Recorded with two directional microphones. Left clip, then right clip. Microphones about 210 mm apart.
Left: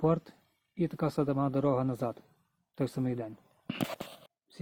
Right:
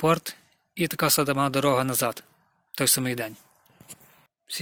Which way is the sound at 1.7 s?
25° right (ahead or behind).